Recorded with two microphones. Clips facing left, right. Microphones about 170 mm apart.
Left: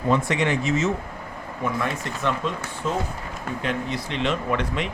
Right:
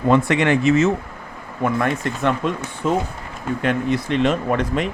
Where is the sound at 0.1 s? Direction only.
65° right (ahead or behind); by 4.9 s 45° right (ahead or behind).